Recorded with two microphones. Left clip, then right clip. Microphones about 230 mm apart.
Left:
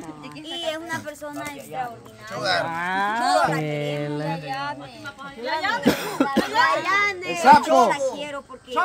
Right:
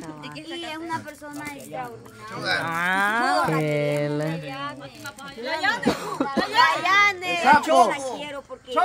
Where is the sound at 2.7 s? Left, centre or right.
Right.